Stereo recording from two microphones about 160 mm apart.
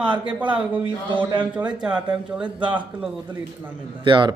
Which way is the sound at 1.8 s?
5° right (ahead or behind).